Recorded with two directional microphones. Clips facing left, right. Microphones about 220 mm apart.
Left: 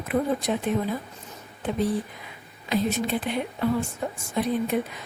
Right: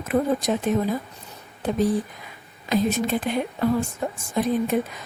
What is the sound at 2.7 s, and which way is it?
Speech, 45° right (ahead or behind).